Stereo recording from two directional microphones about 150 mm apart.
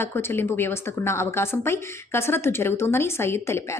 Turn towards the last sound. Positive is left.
turn(degrees=15)  # may be behind; listen again after turning